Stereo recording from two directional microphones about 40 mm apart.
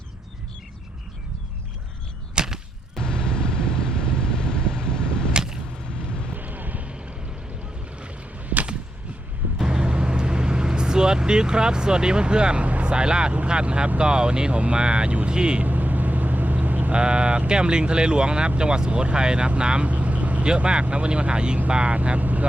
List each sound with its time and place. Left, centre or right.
2.3 s a sound: centre
3.0 s vehicle: centre
5.3 s whip: centre
6.3 s a sound: right
7.9 s boat: right
9.6 s vehicle: centre
12.8 s speech: right
15.6 s vehicle: right
16.9 s speech: right
20.4 s speech: right
21.9 s speech: right